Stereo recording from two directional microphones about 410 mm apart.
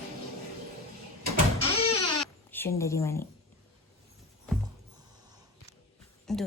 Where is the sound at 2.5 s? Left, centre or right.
Centre.